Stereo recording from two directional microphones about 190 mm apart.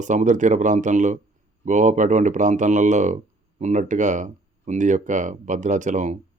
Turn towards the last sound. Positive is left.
turn(degrees=-40)  # may be behind; listen again after turning